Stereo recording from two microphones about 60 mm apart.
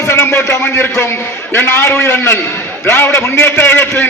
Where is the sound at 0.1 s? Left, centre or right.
Left.